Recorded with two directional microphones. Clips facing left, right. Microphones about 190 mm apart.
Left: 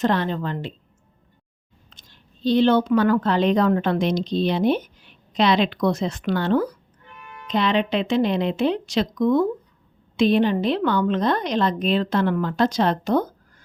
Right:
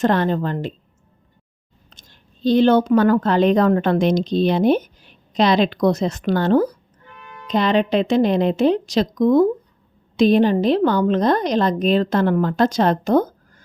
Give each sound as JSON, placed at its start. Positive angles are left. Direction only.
{"t": 0.0, "sound": "a woman's voice", "side_deg": -45}
{"t": 1.9, "sound": "speech", "side_deg": -45}